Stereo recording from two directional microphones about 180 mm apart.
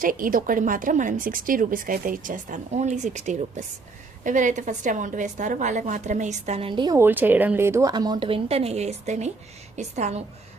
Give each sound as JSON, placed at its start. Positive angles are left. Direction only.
{"t": 0.0, "sound": "a woman's voice", "side_deg": -50}